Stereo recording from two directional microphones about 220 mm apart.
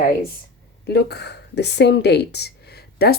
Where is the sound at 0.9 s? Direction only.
50° left (ahead or behind).